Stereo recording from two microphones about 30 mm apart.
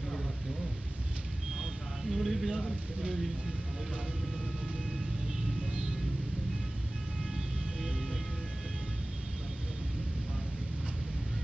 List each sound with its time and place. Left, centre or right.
2.0 s vehicle: centre
5.7 s music: right